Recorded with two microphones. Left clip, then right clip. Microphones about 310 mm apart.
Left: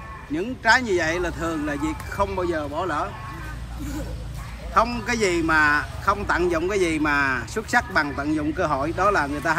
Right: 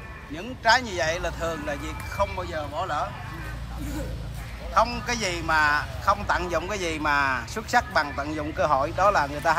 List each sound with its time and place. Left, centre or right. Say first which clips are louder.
0.4 s a man's voice: left 2 dB; centre
4.7 s a man's voice: left 2 dB; centre